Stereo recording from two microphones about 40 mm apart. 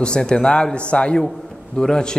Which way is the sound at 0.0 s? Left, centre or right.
Centre.